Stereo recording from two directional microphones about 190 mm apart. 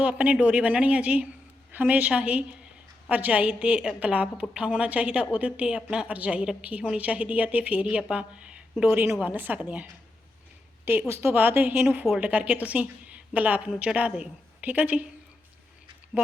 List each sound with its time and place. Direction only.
0.0 s a woman's voice: 5° right (ahead or behind)